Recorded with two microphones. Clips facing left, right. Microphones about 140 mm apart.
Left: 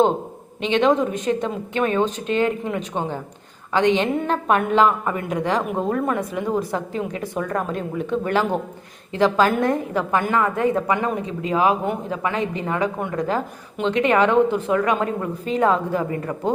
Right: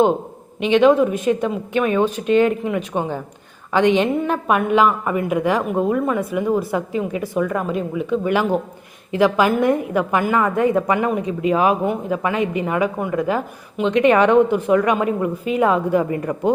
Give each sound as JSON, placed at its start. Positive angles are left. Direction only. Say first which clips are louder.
{"t": 0.8, "sound": "a woman's voice", "louder": "right 4 dB", "side_deg": -5}